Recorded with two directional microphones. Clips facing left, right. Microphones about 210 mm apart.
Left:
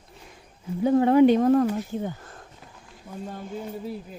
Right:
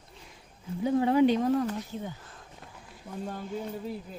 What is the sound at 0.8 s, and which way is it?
Speech, 55° left (ahead or behind).